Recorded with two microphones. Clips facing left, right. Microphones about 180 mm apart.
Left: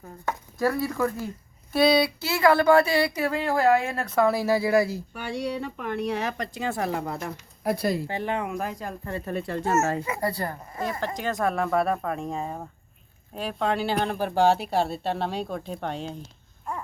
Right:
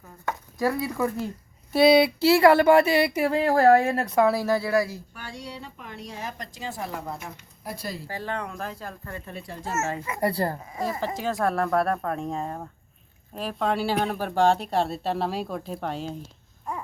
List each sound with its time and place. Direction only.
0.6 s speech: 15° right (ahead or behind)
1.8 s speech: 25° right (ahead or behind); by 4.0 s 45° right (ahead or behind)
4.0 s speech: 15° right (ahead or behind)
4.3 s speech: 5° left (ahead or behind)
5.1 s speech: 65° left (ahead or behind)
8.0 s speech: 20° left (ahead or behind)
9.2 s speech: 55° left (ahead or behind)
10.2 s speech: 25° right (ahead or behind)
10.7 s speech: centre (ahead or behind)